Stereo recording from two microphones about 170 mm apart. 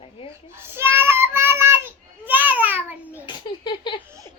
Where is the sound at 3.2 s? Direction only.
30° left (ahead or behind).